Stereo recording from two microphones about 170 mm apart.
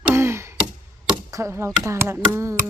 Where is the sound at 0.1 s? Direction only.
15° right (ahead or behind).